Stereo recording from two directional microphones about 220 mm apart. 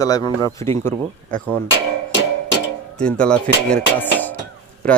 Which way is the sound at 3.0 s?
5° left (ahead or behind).